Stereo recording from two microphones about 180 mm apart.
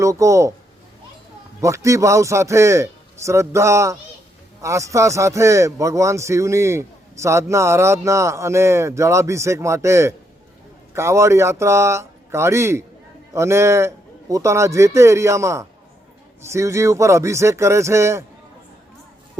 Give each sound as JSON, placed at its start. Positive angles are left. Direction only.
{"t": 0.0, "sound": "speech", "side_deg": -15}
{"t": 1.6, "sound": "speech", "side_deg": -15}